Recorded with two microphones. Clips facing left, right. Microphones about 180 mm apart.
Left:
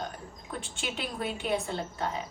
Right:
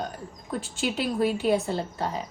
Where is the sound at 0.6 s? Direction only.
Centre (ahead or behind).